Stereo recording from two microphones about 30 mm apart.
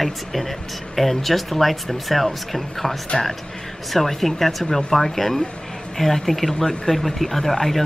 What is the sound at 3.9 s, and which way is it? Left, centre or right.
Speech, centre.